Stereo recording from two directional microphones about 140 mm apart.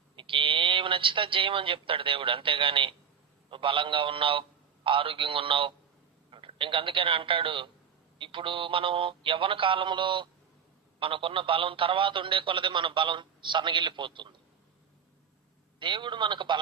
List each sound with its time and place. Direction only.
0.2 s a man's voice: 40° right (ahead or behind)
15.8 s speech: 35° right (ahead or behind)